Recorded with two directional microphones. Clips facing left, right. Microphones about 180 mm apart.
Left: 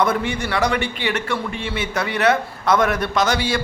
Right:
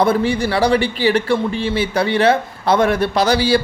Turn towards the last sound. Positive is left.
turn(degrees=-35)  # may be behind; listen again after turning